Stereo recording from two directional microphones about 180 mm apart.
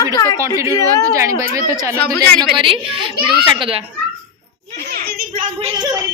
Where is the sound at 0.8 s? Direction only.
15° right (ahead or behind).